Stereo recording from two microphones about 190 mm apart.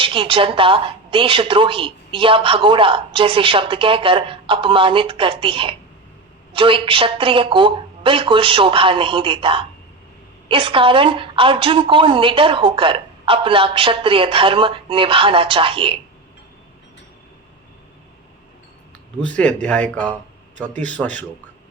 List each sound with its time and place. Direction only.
0.0 s a woman's voice: 30° right (ahead or behind)
19.2 s speech: 5° left (ahead or behind)